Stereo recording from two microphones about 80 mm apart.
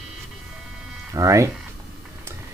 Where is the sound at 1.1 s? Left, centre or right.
Right.